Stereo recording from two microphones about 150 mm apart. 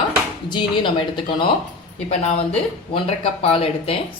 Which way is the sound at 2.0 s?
45° left (ahead or behind).